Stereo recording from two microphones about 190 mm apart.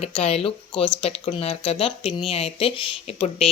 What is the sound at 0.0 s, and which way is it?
Speech, 35° left (ahead or behind).